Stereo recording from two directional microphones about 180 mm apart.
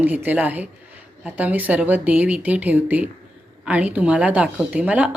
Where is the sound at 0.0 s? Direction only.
10° right (ahead or behind).